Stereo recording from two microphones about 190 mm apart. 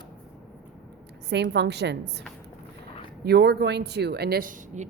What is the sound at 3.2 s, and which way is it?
A woman's voice, 60° right (ahead or behind).